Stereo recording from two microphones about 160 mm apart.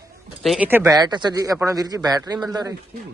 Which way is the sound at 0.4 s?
Centre (ahead or behind).